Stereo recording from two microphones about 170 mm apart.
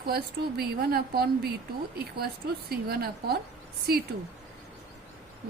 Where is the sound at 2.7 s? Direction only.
65° right (ahead or behind).